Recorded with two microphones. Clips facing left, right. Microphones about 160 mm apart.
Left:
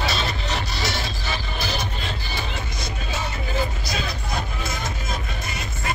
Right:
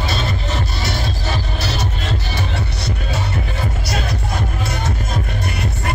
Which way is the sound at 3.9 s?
75° right (ahead or behind).